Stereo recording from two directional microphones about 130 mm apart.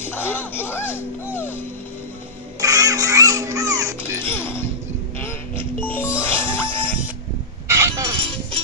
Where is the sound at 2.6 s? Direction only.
25° right (ahead or behind).